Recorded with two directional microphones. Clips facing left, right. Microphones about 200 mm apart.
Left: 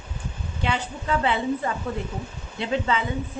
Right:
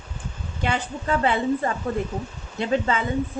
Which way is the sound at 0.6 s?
50° right (ahead or behind).